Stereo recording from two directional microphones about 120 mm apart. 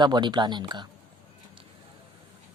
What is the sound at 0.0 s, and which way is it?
Speech, 40° right (ahead or behind).